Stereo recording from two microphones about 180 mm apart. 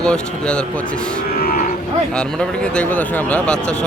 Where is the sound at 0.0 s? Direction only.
5° left (ahead or behind).